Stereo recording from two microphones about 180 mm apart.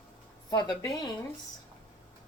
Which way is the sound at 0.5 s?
20° left (ahead or behind).